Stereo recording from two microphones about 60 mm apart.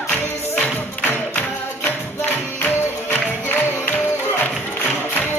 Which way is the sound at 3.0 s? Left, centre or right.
Left.